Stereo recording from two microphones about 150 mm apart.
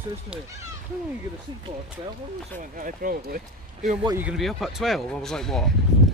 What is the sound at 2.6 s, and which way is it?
Speech, 65° right (ahead or behind).